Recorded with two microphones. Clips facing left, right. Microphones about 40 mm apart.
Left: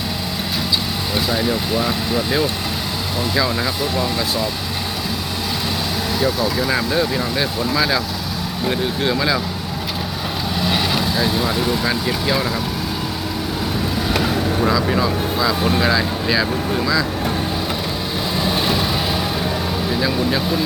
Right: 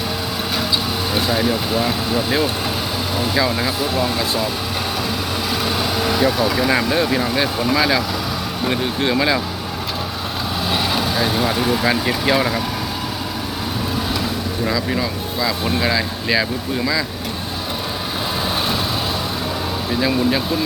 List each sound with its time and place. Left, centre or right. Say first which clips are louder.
1.1 s speech: right 1 dB; centre
3.9 s speech: right 1 dB; centre
6.1 s speech: right 1 dB; right
6.7 s speech: right 2 dB; right
11.3 s speech: right 1 dB; right
14.7 s speech: left 3 dB; centre
20.0 s speech: right 3 dB; centre